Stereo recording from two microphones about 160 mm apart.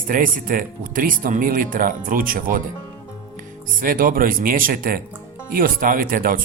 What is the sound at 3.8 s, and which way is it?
Speech, 60° right (ahead or behind).